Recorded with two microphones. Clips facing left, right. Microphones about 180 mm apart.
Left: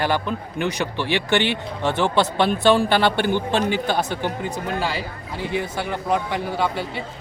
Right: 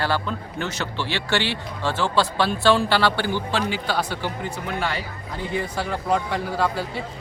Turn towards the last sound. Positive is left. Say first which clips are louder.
# even
turn(degrees=0)  # may be behind; listen again after turning